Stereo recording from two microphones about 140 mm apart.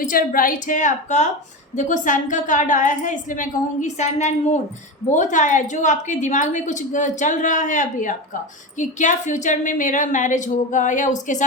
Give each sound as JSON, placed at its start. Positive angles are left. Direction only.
{"t": 0.1, "sound": "a woman's voice", "side_deg": 85}